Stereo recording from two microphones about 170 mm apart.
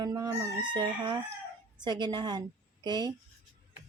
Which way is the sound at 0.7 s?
25° right (ahead or behind).